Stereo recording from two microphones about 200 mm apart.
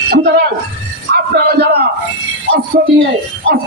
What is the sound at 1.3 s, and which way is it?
Speech, 55° right (ahead or behind).